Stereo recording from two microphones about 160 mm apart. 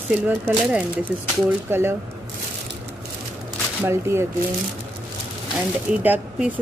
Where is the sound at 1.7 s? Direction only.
15° right (ahead or behind).